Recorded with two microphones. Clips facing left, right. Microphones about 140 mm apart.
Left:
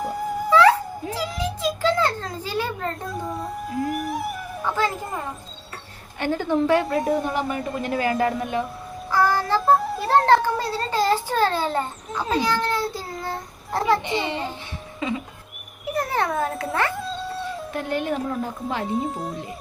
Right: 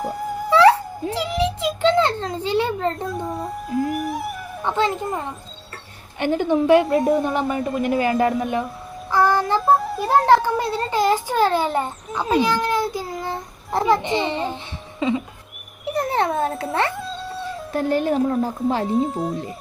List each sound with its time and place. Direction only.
0.0 s wail: centre (ahead or behind)
0.5 s a sound: 30° right (ahead or behind)
3.0 s speech: centre (ahead or behind)
4.6 s a child's voice: 25° right (ahead or behind)
6.1 s a child's voice: 20° right (ahead or behind)
7.0 s speech: centre (ahead or behind)
7.3 s a child's voice: 25° right (ahead or behind)
9.6 s speech: centre (ahead or behind)
10.1 s a child's voice: 10° right (ahead or behind)
16.9 s cat: centre (ahead or behind)
17.7 s speech: 35° right (ahead or behind)
18.9 s speech: centre (ahead or behind)